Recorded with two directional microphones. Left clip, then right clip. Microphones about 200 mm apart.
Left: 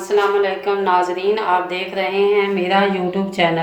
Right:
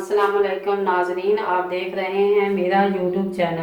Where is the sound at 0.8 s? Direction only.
50° left (ahead or behind).